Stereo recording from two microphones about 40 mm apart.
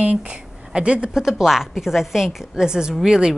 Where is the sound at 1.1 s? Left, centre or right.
Centre.